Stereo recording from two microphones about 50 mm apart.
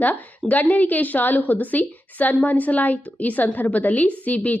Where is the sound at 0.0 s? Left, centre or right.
Left.